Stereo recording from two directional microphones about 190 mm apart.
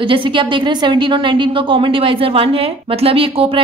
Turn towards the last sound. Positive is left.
turn(degrees=-30)  # may be behind; listen again after turning